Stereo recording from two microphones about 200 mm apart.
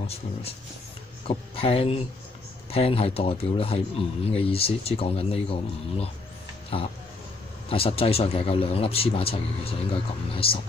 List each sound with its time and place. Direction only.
0.0 s a man's voice: 30° left (ahead or behind)
7.7 s a man's voice: 30° left (ahead or behind)